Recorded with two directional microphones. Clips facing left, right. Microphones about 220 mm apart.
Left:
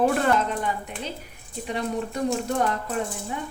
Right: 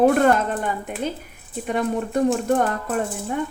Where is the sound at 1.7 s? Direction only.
50° right (ahead or behind).